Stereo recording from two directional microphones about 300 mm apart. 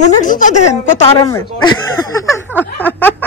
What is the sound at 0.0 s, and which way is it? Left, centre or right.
Speech, left.